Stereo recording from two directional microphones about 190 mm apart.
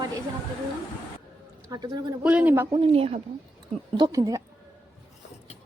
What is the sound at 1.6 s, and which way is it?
Speech, 20° right (ahead or behind).